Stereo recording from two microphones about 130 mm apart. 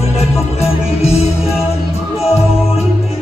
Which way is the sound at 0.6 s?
55° left (ahead or behind).